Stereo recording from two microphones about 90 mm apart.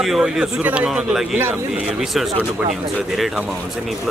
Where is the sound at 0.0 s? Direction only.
5° right (ahead or behind).